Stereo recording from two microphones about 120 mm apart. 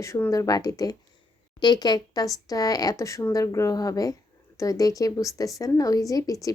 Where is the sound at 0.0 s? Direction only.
25° left (ahead or behind).